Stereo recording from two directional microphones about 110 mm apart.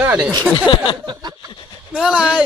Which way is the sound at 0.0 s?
10° right (ahead or behind).